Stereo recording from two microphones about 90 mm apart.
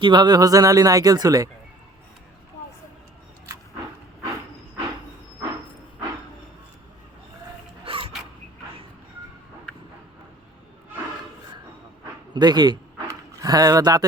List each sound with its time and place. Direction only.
0.0 s speech: 55° right (ahead or behind)
7.9 s music: 75° right (ahead or behind)
12.3 s speech: 55° right (ahead or behind)
13.4 s speech: 40° right (ahead or behind)